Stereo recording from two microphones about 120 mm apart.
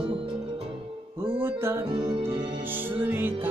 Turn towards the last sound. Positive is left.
turn(degrees=-15)  # may be behind; listen again after turning